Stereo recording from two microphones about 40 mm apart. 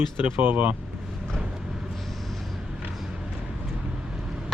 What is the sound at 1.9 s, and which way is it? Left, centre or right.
Vehicle, centre.